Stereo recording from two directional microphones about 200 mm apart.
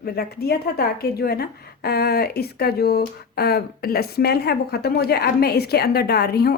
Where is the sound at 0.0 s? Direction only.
50° left (ahead or behind).